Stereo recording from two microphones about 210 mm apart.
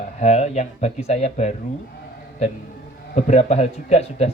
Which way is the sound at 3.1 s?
30° left (ahead or behind).